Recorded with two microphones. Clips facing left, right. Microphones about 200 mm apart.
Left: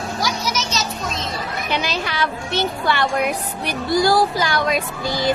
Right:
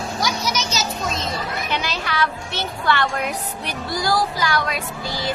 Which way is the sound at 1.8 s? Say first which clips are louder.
Left 1 dB; 20° left (ahead or behind).